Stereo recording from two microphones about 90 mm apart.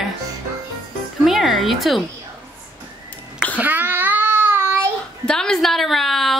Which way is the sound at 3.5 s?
20° right (ahead or behind).